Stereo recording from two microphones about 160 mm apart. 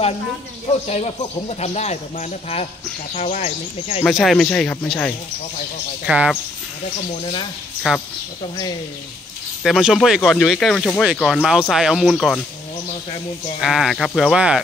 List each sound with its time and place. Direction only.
0.8 s speech: 40° left (ahead or behind)
4.0 s speech: centre (ahead or behind)
6.0 s speech: 5° right (ahead or behind)
7.8 s speech: 5° right (ahead or behind)
9.6 s speech: centre (ahead or behind)
13.6 s speech: centre (ahead or behind)